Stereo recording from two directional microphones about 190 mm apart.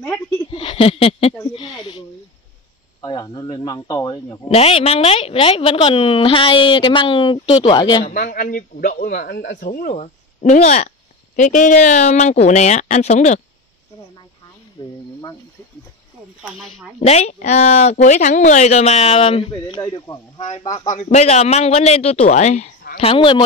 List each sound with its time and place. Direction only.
0.5 s a sound: 30° left (ahead or behind)
3.0 s a woman's voice: 20° left (ahead or behind)
4.6 s a woman's voice: 30° left (ahead or behind)
8.1 s speech: 45° left (ahead or behind)
14.8 s a woman's voice: 25° left (ahead or behind)
17.0 s a woman's voice: 35° left (ahead or behind)